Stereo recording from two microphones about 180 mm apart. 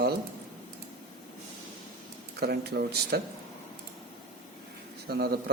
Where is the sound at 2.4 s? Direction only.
65° right (ahead or behind).